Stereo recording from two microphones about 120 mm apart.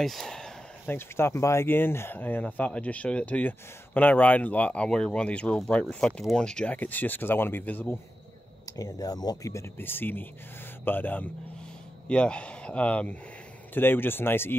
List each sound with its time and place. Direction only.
0.0 s speech: centre (ahead or behind)
0.8 s speech: 20° left (ahead or behind)
8.6 s speech: 30° left (ahead or behind)